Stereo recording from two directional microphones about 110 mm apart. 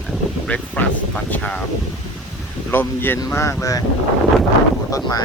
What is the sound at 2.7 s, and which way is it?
Speech, 20° left (ahead or behind).